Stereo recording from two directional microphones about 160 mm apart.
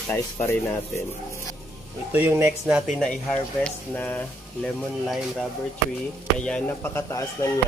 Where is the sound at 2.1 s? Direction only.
15° right (ahead or behind).